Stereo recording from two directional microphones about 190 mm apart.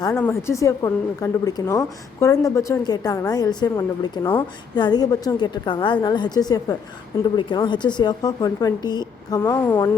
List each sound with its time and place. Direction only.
0.1 s a woman's voice: 10° left (ahead or behind)